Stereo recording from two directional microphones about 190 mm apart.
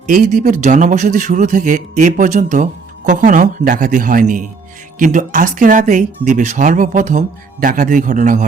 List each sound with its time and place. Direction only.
0.1 s speech: 45° right (ahead or behind)